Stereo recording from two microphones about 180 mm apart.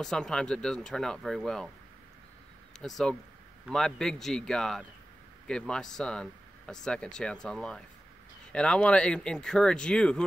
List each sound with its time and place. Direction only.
0.0 s speech: 5° left (ahead or behind)
2.8 s speech: 5° left (ahead or behind)